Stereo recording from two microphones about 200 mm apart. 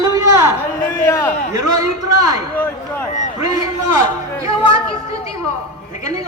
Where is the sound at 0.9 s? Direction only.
15° left (ahead or behind).